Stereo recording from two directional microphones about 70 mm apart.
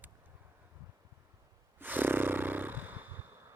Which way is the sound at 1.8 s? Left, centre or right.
Right.